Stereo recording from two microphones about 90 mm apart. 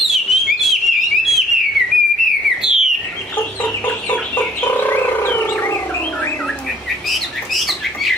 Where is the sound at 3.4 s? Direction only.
20° left (ahead or behind).